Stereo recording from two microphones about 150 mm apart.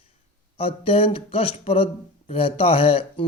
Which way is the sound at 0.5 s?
40° left (ahead or behind).